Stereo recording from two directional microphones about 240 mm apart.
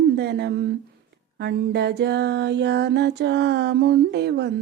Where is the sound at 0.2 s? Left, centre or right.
Right.